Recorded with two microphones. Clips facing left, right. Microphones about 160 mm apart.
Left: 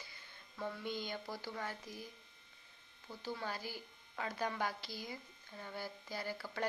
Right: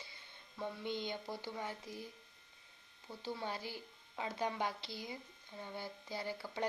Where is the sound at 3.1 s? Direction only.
25° right (ahead or behind).